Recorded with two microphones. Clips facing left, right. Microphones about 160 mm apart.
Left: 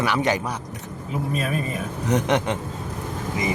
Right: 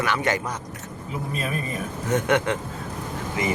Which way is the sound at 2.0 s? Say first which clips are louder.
Even; 20° left (ahead or behind).